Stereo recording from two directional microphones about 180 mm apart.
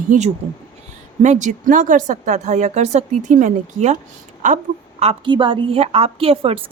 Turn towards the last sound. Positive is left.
turn(degrees=-30)  # may be behind; listen again after turning